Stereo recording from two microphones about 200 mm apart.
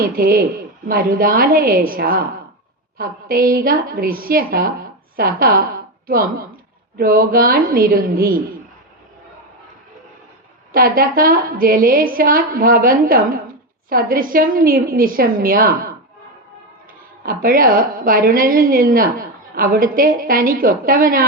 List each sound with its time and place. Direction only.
0.0 s a woman's voice: 50° right (ahead or behind)
10.7 s a woman's voice: 50° right (ahead or behind)
17.2 s a woman's voice: 45° right (ahead or behind)